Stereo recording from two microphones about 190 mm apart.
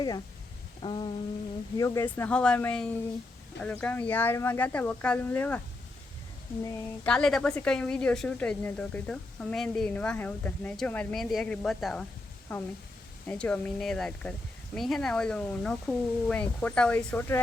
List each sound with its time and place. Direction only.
0.8 s a sound: 25° left (ahead or behind)
1.8 s speech: 15° left (ahead or behind)
6.6 s speech: 15° left (ahead or behind)
7.1 s speech: 5° left (ahead or behind)